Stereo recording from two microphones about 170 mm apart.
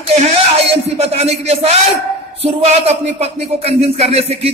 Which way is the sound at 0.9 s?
40° right (ahead or behind).